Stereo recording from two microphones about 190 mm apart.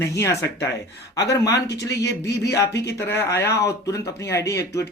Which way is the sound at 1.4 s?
60° left (ahead or behind).